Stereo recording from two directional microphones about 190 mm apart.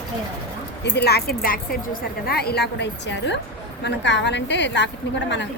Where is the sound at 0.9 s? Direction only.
60° left (ahead or behind).